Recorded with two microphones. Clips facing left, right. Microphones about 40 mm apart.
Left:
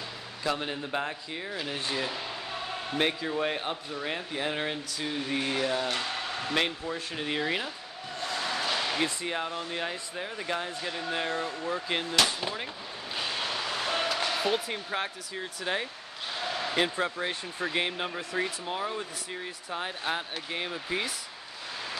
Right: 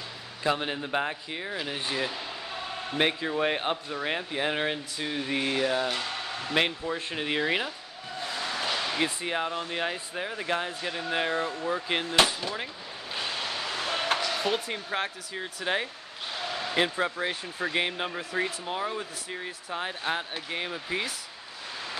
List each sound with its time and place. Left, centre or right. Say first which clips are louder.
0.4 s speech: right 3 dB; right
2.0 s a sound: even; centre
3.0 s speech: right 2 dB; centre
5.9 s a sound: left 1 dB; centre
6.5 s speech: right 3 dB; centre
8.2 s a sound: left 1 dB; centre
9.0 s speech: right 2 dB; centre
13.1 s vehicle: even; centre
14.4 s speech: even; centre